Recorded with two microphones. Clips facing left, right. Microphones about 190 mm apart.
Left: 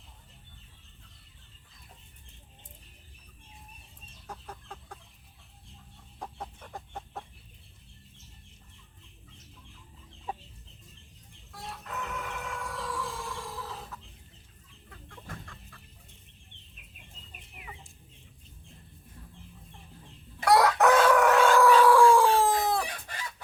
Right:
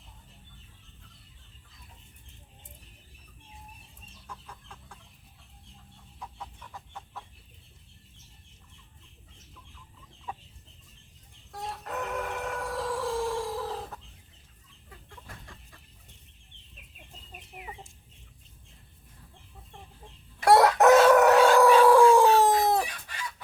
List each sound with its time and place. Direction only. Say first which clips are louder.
6.1 s chicken: left 3 dB; 50° left (ahead or behind)
11.8 s chicken: right 5 dB; 45° right (ahead or behind)
20.4 s chicken: right 3 dB; 25° right (ahead or behind)
21.2 s a sound: right 3 dB; 40° right (ahead or behind)
21.6 s chicken: right 1 dB; 20° right (ahead or behind)